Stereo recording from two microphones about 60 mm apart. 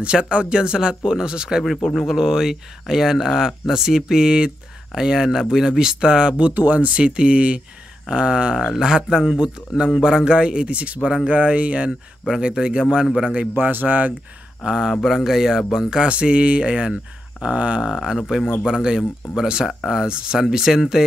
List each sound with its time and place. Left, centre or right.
0.0 s speech: centre
13.3 s speech: right
14.6 s speech: centre
15.0 s speech: centre
15.2 s speech: centre
17.9 s speech: centre